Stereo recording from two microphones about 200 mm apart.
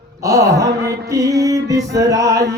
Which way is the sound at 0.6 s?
55° right (ahead or behind).